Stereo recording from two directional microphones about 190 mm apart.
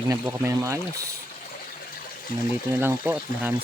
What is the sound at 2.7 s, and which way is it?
Speech, 10° right (ahead or behind).